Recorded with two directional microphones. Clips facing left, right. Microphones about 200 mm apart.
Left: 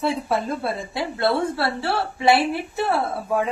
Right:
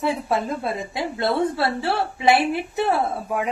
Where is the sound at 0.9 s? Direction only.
20° right (ahead or behind).